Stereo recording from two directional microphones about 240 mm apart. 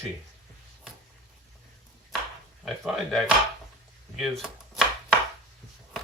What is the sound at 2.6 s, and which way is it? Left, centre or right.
Speech, centre.